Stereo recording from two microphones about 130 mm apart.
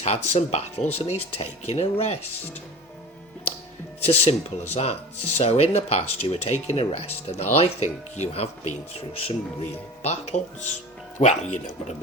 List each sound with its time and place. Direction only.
0.0 s speech: 55° left (ahead or behind)
4.0 s speech: 55° left (ahead or behind)